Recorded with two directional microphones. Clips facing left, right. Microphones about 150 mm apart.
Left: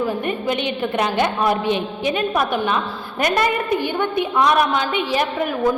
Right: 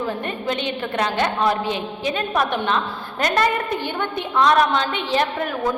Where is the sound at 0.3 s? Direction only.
15° left (ahead or behind).